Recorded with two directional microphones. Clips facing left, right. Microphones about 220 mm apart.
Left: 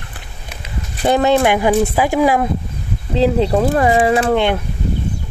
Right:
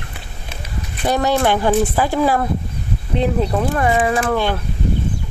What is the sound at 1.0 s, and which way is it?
Speech, 25° left (ahead or behind).